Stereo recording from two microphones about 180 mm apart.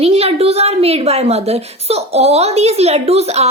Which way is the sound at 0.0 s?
35° right (ahead or behind).